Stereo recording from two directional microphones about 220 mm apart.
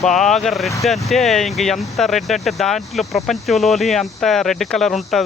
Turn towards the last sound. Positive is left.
turn(degrees=0)  # may be behind; listen again after turning